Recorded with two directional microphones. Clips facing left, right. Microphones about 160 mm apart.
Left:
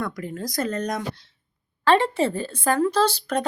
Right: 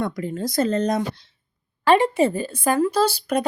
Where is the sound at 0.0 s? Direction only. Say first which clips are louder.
Right 4 dB; 25° right (ahead or behind).